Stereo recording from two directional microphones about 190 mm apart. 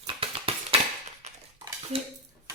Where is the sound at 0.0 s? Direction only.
30° right (ahead or behind).